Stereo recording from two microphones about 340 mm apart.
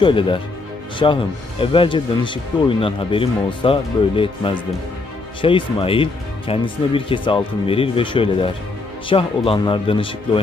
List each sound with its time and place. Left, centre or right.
0.0 s speech: centre